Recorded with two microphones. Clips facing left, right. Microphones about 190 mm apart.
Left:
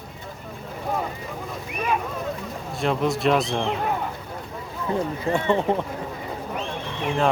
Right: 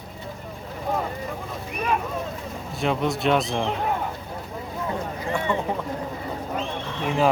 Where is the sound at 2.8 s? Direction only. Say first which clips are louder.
Left 1 dB; centre (ahead or behind).